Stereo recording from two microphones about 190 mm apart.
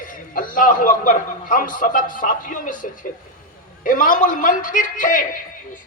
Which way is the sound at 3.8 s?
45° left (ahead or behind).